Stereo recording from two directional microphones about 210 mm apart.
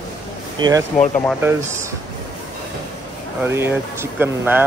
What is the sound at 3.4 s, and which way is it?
Speech, 10° right (ahead or behind).